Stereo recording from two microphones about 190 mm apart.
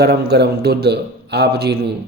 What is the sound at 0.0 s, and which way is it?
A man's voice, 60° right (ahead or behind).